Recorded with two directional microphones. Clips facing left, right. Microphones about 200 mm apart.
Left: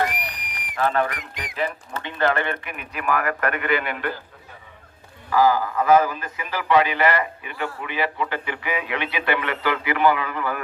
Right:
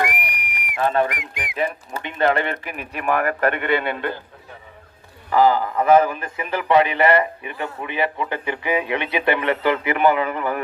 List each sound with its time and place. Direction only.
0.7 s speech: 20° right (ahead or behind)
5.3 s speech: 25° right (ahead or behind)